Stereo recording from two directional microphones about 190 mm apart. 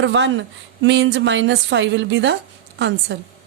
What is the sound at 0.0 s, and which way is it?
A woman's voice, 75° right (ahead or behind).